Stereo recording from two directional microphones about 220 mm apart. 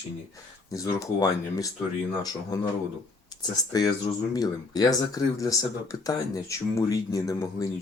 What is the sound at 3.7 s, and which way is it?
Speech, 15° left (ahead or behind).